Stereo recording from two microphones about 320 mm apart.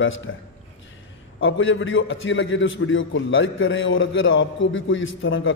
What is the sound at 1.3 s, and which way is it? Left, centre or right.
A man's voice, left.